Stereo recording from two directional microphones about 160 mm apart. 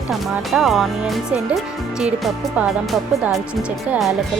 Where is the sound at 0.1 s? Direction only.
Centre (ahead or behind).